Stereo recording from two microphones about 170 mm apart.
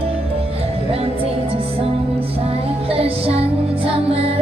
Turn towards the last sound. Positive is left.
turn(degrees=-35)  # may be behind; listen again after turning